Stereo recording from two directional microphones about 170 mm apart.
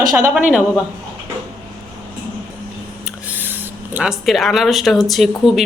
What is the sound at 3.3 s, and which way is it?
Speech, 10° right (ahead or behind).